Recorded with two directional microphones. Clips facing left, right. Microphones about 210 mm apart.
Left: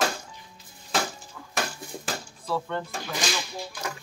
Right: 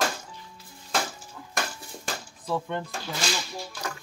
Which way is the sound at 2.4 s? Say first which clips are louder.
Even; 15° right (ahead or behind).